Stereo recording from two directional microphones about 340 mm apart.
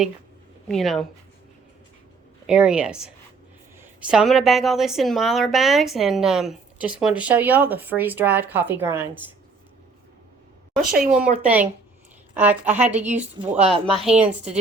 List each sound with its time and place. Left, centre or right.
0.7 s a woman's voice: centre
2.5 s a woman's voice: centre
11.1 s a woman's voice: centre
12.7 s speech: centre
13.1 s a woman's voice: centre